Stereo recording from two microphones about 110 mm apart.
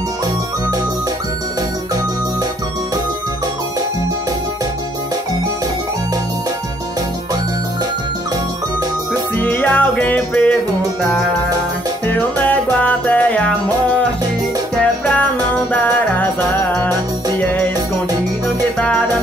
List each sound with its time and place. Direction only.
9.4 s music: 15° left (ahead or behind)
12.1 s music: 15° left (ahead or behind)
18.8 s music: 10° left (ahead or behind)